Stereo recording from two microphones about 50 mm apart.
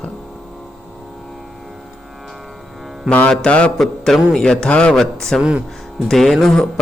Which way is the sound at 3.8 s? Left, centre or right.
Centre.